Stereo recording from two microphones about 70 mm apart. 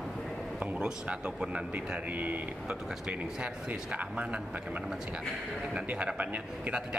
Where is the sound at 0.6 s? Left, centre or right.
Centre.